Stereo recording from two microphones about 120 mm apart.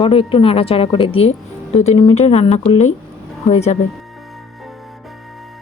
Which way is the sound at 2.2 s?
65° left (ahead or behind).